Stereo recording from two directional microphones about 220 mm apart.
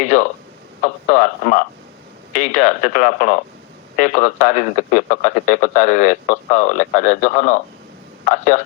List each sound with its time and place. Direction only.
0.0 s a man's voice: 35° left (ahead or behind)